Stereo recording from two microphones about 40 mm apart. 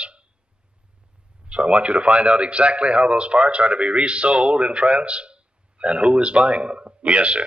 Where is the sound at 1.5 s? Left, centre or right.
Right.